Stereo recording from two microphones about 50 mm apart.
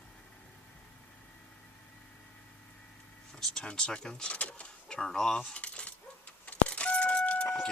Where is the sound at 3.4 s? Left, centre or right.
Centre.